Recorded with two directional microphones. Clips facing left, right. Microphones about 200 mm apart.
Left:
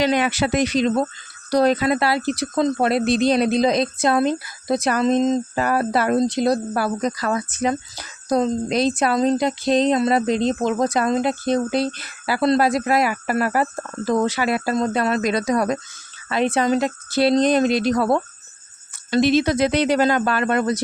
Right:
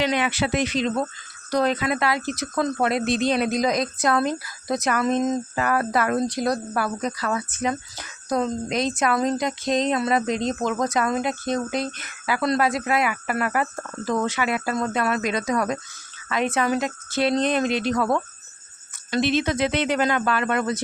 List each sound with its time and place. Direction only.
0.0 s speech: 40° left (ahead or behind)
9.1 s speech: 20° left (ahead or behind)
9.4 s speech: 35° left (ahead or behind)